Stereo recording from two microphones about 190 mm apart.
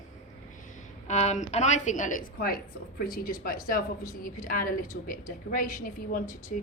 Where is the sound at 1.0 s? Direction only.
35° left (ahead or behind).